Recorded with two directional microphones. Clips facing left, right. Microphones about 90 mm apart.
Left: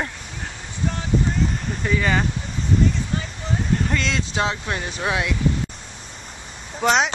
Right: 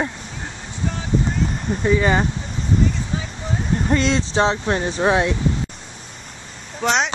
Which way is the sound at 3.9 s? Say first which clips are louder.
Right 5 dB; 35° right (ahead or behind).